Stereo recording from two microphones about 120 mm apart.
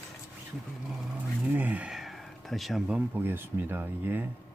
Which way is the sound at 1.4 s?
15° right (ahead or behind).